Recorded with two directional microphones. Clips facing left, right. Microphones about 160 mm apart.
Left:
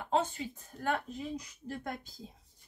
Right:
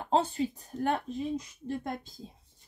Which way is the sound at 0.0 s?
35° right (ahead or behind).